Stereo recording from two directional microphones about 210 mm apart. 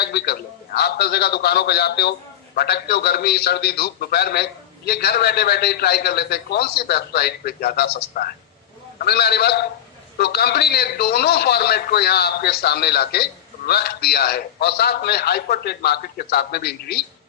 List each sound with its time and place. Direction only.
0.0 s a man's voice: 50° left (ahead or behind)